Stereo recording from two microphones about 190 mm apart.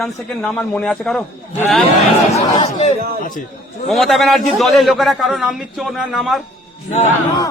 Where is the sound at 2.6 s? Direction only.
35° left (ahead or behind).